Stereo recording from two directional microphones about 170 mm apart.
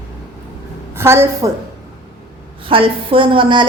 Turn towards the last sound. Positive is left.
turn(degrees=-30)  # may be behind; listen again after turning